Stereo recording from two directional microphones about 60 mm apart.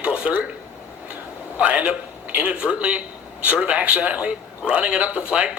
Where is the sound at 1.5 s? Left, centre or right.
Right.